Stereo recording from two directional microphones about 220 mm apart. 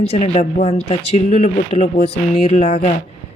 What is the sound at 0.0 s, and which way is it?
Speech, 30° left (ahead or behind).